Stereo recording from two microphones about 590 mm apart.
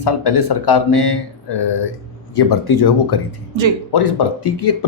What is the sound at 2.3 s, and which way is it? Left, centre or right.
Speech, left.